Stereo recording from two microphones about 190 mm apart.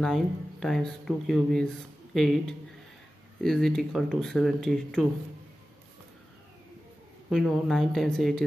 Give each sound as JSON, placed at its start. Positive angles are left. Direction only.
{"t": 0.0, "sound": "speech", "side_deg": 0}
{"t": 7.2, "sound": "speech", "side_deg": 0}